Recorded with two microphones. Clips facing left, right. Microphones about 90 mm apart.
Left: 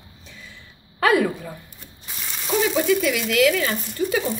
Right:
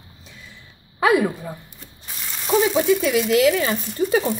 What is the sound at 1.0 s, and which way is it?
Frying, 15° right (ahead or behind).